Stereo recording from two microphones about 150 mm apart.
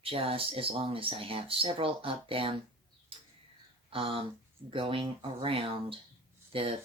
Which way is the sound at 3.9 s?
35° right (ahead or behind).